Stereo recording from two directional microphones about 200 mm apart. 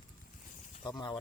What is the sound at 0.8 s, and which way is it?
Speech, 20° left (ahead or behind).